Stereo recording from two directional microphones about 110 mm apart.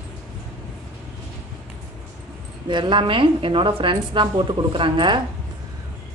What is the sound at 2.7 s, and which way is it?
A woman's voice, 45° right (ahead or behind).